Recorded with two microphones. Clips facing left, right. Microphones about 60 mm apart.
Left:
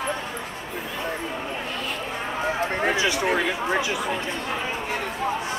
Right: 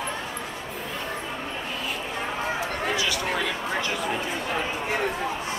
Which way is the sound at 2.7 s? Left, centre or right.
Left.